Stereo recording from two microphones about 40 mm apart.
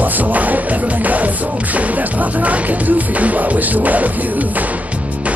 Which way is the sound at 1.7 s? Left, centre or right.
Right.